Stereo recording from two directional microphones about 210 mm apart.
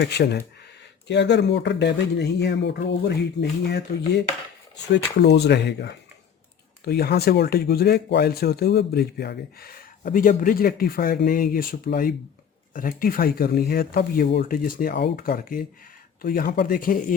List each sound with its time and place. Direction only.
0.0 s speech: 50° left (ahead or behind)